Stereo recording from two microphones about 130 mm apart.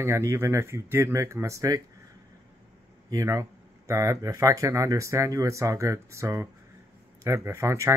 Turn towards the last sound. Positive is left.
turn(degrees=-20)  # may be behind; listen again after turning